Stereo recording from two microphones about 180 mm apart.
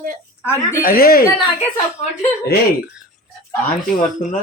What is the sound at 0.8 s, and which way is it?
Speech, 55° left (ahead or behind).